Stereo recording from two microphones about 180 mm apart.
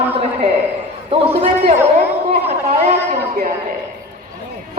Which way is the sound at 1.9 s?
35° right (ahead or behind).